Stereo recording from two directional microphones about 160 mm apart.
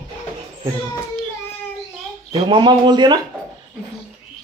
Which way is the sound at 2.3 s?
30° right (ahead or behind).